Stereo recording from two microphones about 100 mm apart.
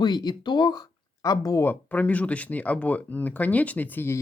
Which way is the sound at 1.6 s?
15° left (ahead or behind).